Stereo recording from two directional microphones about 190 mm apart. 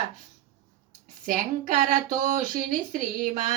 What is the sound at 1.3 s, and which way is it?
Speech, 45° right (ahead or behind).